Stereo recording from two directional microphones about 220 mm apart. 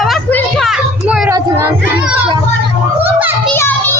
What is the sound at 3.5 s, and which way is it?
Children playing, 10° left (ahead or behind).